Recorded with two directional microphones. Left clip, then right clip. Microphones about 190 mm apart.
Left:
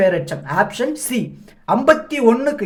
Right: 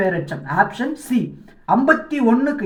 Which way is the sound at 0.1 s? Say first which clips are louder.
Left 3 dB; 55° left (ahead or behind).